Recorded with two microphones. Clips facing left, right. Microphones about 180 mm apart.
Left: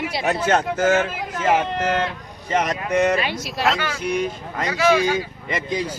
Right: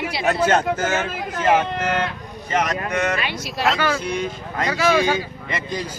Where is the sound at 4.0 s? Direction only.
15° left (ahead or behind).